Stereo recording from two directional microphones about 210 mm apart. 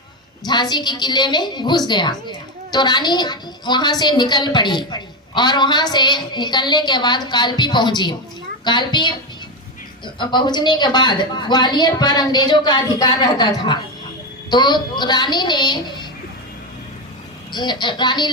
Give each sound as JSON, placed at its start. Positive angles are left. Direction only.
{"t": 0.4, "sound": "a woman's voice", "side_deg": 20}
{"t": 10.2, "sound": "a woman's voice", "side_deg": 20}
{"t": 17.5, "sound": "a woman's voice", "side_deg": 20}